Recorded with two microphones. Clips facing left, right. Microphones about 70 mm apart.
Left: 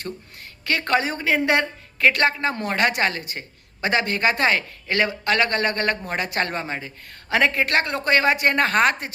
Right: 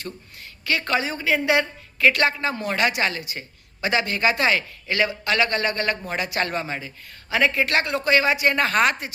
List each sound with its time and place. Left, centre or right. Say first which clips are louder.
0.6 s speech: left 2 dB; left
7.3 s speech: left 1 dB; left